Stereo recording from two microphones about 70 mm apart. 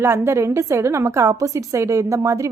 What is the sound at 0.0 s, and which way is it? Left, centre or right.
A woman's voice, right.